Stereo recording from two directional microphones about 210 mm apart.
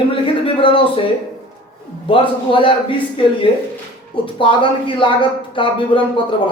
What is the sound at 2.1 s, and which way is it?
Speech, 25° left (ahead or behind).